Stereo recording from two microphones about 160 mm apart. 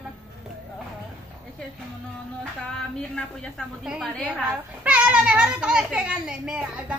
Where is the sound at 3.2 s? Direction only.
Centre (ahead or behind).